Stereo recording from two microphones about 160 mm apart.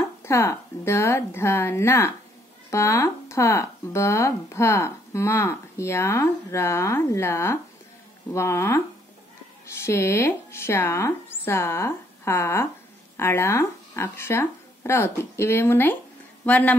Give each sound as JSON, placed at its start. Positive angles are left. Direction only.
{"t": 0.2, "sound": "speech", "side_deg": 20}